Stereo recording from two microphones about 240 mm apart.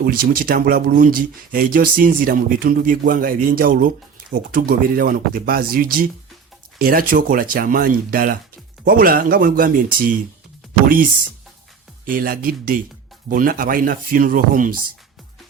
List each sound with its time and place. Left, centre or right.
0.0 s speech: right
12.0 s speech: right